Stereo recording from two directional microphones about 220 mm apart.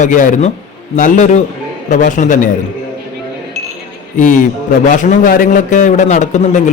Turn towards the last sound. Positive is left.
turn(degrees=35)  # may be behind; listen again after turning